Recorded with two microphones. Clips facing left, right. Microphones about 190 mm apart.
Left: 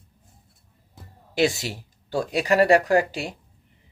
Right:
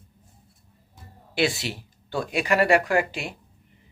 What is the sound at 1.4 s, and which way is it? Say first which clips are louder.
Speech: left 2 dB; 40° left (ahead or behind).